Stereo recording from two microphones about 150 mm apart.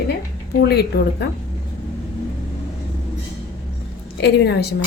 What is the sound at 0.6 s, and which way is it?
Dishes, 90° left.